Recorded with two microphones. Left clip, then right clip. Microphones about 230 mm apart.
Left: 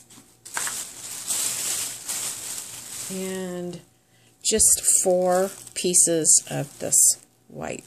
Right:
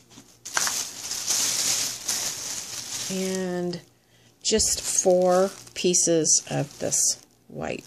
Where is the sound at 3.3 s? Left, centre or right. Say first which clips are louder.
Right 3 dB; centre.